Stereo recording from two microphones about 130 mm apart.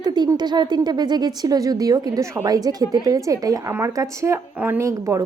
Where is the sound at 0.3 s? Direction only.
35° right (ahead or behind).